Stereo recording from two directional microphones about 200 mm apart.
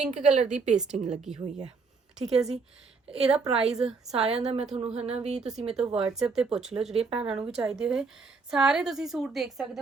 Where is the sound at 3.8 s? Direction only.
Centre (ahead or behind).